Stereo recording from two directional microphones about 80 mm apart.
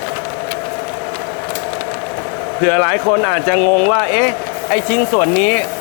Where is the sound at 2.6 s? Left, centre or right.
Left.